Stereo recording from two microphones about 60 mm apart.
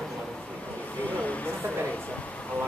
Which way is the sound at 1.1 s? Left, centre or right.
Left.